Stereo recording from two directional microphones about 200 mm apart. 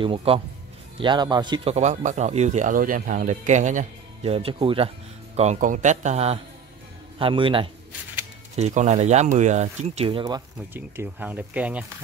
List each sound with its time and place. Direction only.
0.0 s a man's voice: 25° right (ahead or behind)
10.7 s speech: 10° right (ahead or behind)